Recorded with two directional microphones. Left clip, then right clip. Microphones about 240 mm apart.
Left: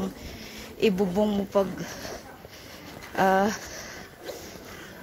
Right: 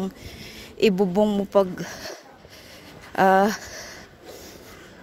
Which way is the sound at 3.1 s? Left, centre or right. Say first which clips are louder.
Right 5 dB; right.